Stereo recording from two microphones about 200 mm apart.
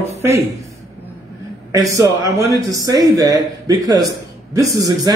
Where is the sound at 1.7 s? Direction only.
15° right (ahead or behind).